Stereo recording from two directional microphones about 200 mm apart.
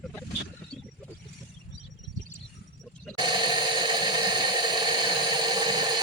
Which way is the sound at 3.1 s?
20° right (ahead or behind).